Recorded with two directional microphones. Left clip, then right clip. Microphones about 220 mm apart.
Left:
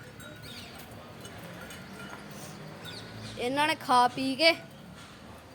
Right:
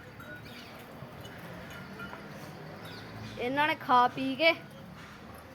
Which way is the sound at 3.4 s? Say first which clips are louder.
Left 1 dB; 15° left (ahead or behind).